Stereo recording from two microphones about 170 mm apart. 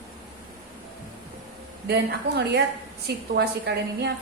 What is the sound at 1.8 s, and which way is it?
A woman's voice, 70° right (ahead or behind).